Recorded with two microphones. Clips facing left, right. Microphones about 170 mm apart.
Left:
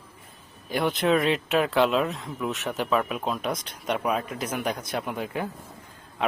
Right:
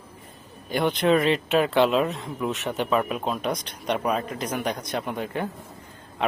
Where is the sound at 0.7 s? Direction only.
Centre (ahead or behind).